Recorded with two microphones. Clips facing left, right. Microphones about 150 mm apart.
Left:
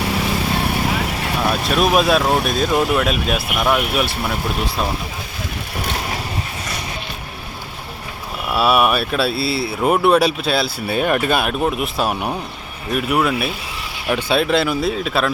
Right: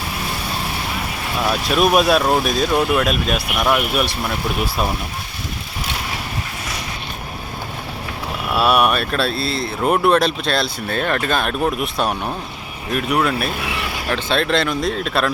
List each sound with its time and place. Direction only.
1.5 s speech: centre (ahead or behind)
8.5 s speech: centre (ahead or behind)
13.5 s a sound: 65° right (ahead or behind)
14.1 s speech: 10° left (ahead or behind)